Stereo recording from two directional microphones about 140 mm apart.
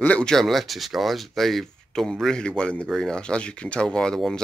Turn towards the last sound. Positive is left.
turn(degrees=5)  # may be behind; listen again after turning